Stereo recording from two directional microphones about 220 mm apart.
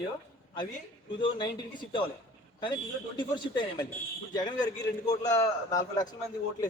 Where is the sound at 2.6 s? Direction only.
20° left (ahead or behind).